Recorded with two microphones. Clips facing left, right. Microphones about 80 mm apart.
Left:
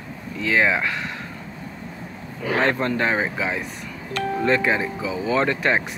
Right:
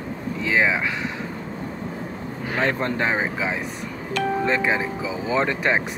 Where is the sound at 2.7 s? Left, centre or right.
Right.